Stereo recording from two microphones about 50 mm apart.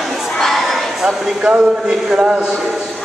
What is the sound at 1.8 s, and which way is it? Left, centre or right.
Speech, centre.